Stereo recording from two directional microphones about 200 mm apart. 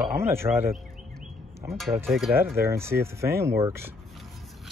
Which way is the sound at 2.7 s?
15° right (ahead or behind).